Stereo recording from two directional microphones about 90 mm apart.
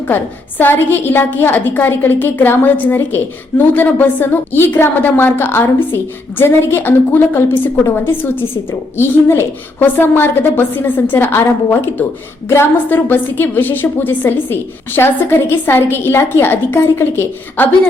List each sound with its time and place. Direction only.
0.6 s a woman's voice: 25° left (ahead or behind)